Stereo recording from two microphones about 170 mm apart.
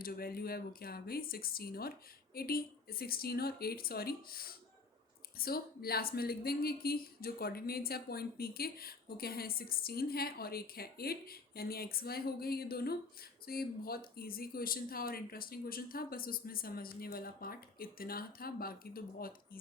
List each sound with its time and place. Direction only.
0.0 s a woman's voice: 60° left (ahead or behind)